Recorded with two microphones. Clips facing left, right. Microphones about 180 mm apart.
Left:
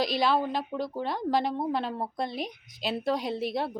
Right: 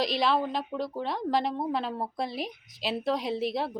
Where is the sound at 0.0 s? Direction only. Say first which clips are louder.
Left 1 dB; centre (ahead or behind).